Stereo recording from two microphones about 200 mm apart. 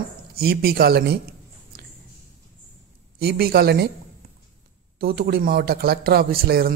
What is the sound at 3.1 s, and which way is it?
Speech, 50° right (ahead or behind).